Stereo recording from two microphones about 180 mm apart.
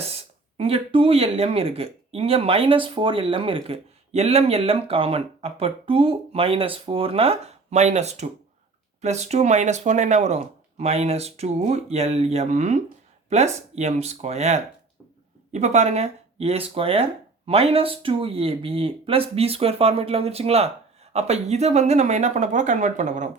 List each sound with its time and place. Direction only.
0.0 s speech: 35° right (ahead or behind)